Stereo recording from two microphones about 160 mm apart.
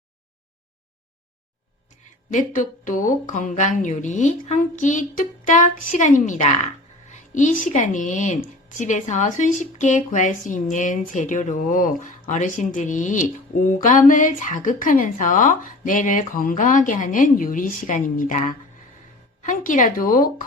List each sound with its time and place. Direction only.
2.3 s a woman's voice: 55° left (ahead or behind)